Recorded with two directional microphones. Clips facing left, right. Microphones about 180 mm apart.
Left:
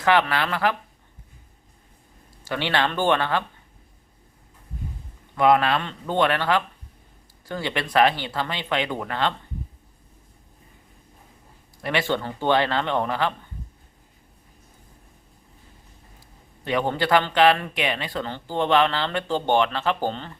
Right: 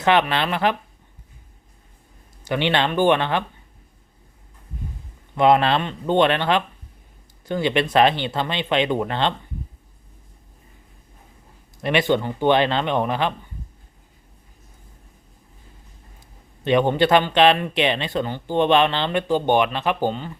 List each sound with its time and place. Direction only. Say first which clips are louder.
0.0 s speech: right 2 dB; 20° right (ahead or behind)
2.4 s speech: right 3 dB; 20° right (ahead or behind)
5.4 s speech: right 2 dB; 25° right (ahead or behind)
11.8 s speech: right 5 dB; 20° right (ahead or behind)
16.6 s speech: right 6 dB; 20° right (ahead or behind)